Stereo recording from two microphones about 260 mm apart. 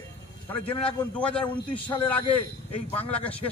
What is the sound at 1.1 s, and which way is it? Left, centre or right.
Speech, centre.